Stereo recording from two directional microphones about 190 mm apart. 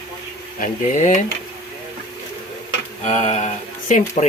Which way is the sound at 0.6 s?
40° left (ahead or behind).